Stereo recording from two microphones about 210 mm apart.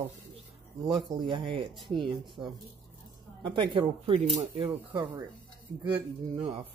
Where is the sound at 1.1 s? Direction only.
25° right (ahead or behind).